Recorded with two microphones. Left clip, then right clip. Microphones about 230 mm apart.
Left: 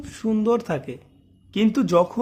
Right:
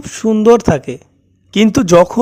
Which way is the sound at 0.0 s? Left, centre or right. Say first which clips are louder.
Right 13 dB; right.